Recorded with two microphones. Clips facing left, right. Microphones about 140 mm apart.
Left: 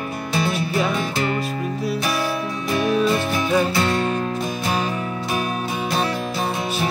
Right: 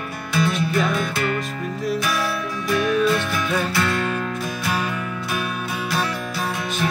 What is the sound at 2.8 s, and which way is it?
Music, 25° left (ahead or behind).